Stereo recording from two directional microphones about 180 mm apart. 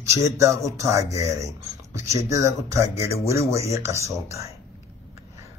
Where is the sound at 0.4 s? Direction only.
15° right (ahead or behind).